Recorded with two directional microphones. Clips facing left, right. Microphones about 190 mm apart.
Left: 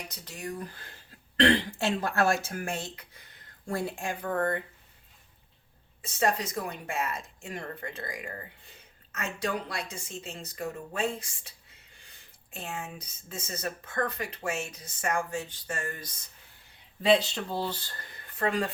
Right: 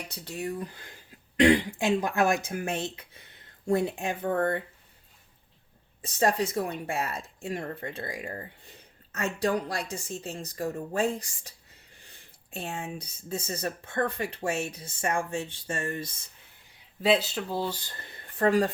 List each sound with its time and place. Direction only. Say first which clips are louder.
0.1 s speech: right 4 dB; 30° right (ahead or behind)
1.4 s speech: right 3 dB; 10° right (ahead or behind); by 4.6 s 25° right (ahead or behind)
6.1 s speech: right 3 dB; 30° right (ahead or behind)
12.5 s speech: right 3 dB; 30° right (ahead or behind)
17.0 s speech: left 1 dB; 5° right (ahead or behind)
18.3 s speech: right 6 dB; 35° right (ahead or behind)